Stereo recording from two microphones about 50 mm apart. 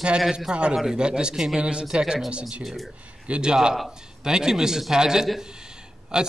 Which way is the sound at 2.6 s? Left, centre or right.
Centre.